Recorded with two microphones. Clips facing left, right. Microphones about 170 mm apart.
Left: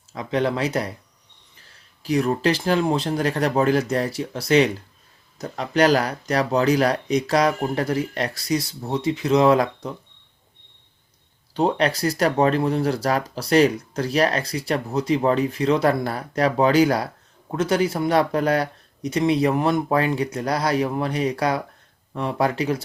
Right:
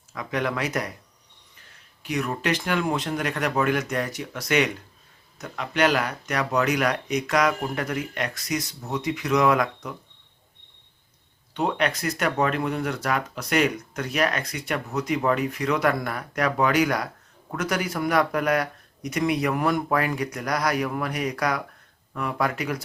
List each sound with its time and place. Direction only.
0.1 s speech: 30° left (ahead or behind)
2.0 s speech: 30° left (ahead or behind)
11.5 s speech: 35° left (ahead or behind)